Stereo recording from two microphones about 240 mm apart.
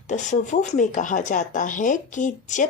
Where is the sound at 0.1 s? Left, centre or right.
Left.